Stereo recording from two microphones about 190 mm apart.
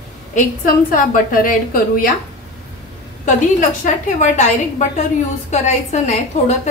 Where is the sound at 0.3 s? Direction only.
45° left (ahead or behind).